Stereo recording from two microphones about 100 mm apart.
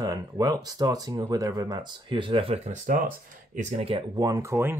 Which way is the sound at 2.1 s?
60° right (ahead or behind).